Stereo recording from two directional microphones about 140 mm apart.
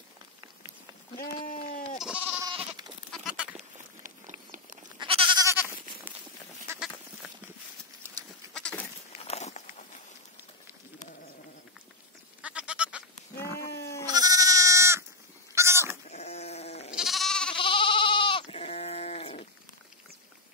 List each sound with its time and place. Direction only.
1.1 s sheep: 80° left
2.0 s goat: 10° right (ahead or behind)
4.9 s goat: 40° right (ahead or behind)
5.4 s goat: 15° right (ahead or behind)
8.5 s goat: 5° left (ahead or behind)
9.2 s walk: 50° left (ahead or behind)
12.4 s goat: 10° right (ahead or behind)
14.0 s goat: 25° right (ahead or behind)
16.1 s sheep: 50° left (ahead or behind)
16.9 s goat: centre (ahead or behind)
17.6 s sheep: 35° left (ahead or behind)